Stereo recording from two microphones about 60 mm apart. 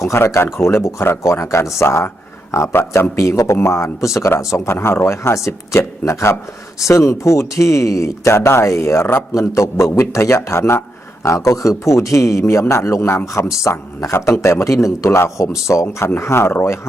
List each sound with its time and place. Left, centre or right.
0.1 s speech: left
3.2 s speech: left
9.3 s speech: left
11.2 s speech: left
13.0 s speech: left